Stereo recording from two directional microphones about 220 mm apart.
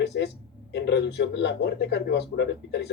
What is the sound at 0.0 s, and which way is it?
Speech, 50° left (ahead or behind).